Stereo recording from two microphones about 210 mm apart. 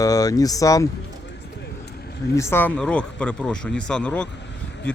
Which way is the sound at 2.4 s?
10° left (ahead or behind).